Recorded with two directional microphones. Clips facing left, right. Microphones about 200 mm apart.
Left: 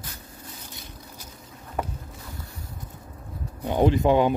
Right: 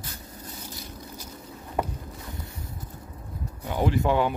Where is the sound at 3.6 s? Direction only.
20° left (ahead or behind).